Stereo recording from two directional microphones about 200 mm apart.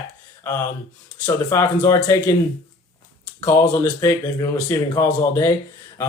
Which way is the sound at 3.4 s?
15° left (ahead or behind).